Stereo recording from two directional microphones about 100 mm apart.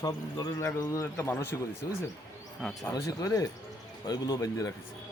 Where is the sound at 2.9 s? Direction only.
35° left (ahead or behind).